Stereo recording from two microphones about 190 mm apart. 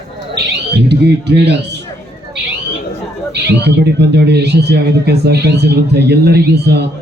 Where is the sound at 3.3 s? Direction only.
65° right (ahead or behind).